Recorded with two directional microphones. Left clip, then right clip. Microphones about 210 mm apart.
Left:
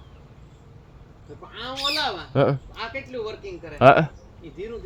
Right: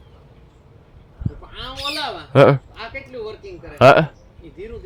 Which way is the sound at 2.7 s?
5° right (ahead or behind).